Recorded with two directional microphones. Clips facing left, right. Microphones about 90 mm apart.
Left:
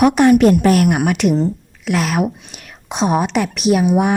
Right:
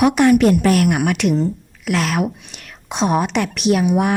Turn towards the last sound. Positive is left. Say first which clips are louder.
# left 2 dB
turn(degrees=5)  # may be behind; listen again after turning